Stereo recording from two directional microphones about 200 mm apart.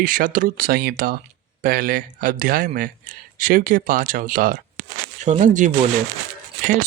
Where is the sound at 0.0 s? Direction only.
45° right (ahead or behind).